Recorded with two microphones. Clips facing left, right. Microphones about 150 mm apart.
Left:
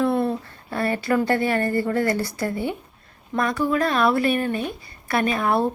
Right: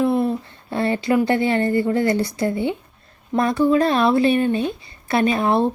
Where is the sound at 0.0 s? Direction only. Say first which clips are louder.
Right 2 dB; 15° right (ahead or behind).